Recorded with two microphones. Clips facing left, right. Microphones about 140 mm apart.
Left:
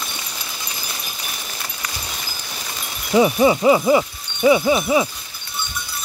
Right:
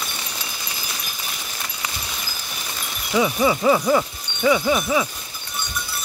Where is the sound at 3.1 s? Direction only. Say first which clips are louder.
Left 5 dB; 25° left (ahead or behind).